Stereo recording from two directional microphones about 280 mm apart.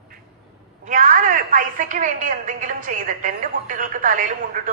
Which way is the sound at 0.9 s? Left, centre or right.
Right.